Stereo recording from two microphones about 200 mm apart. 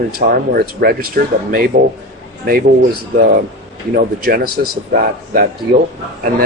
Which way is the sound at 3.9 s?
50° right (ahead or behind).